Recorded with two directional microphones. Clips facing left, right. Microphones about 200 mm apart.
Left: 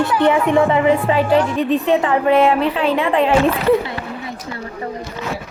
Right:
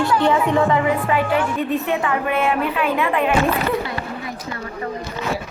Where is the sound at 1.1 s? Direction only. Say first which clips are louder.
Left 4 dB; 35° left (ahead or behind).